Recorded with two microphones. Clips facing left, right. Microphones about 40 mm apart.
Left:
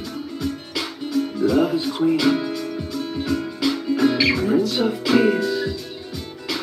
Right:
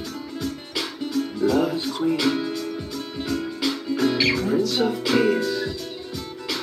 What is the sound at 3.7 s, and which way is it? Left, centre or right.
Music, centre.